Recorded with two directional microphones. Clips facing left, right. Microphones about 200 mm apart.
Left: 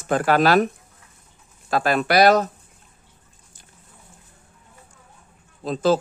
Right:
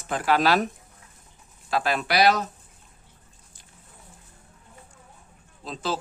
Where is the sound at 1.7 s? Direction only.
50° left (ahead or behind).